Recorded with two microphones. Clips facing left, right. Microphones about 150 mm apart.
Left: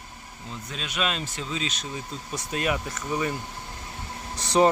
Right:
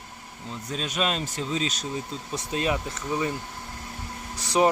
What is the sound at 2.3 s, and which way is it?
Speech, 25° right (ahead or behind).